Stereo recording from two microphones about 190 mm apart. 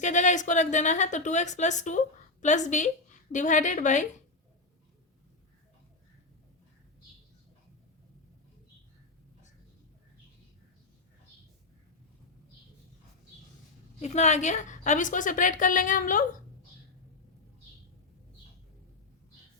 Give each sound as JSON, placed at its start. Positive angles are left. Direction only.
{"t": 0.0, "sound": "a woman's voice", "side_deg": 40}
{"t": 14.0, "sound": "a woman's voice", "side_deg": 35}